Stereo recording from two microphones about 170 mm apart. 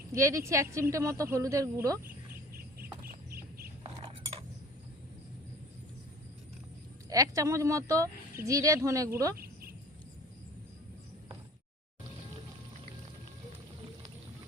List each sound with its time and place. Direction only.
0.1 s a woman's voice: 15° right (ahead or behind)
3.0 s bird: 60° right (ahead or behind)
7.1 s speech: 20° right (ahead or behind)
9.4 s a sound: 60° right (ahead or behind)